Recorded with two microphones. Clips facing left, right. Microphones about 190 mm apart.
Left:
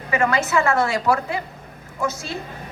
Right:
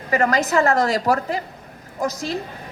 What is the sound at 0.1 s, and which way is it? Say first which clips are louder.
A woman's voice: right 1 dB; 40° right (ahead or behind).